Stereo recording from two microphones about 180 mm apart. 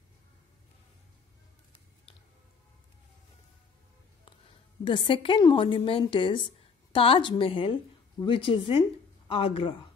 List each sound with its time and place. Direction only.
4.8 s a woman's voice: 30° left (ahead or behind)